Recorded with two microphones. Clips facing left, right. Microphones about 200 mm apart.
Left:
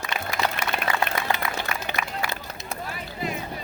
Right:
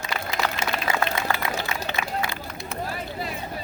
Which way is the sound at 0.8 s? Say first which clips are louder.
Even; 55° left (ahead or behind).